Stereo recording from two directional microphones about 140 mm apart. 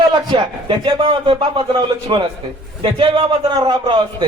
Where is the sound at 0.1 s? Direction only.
30° right (ahead or behind).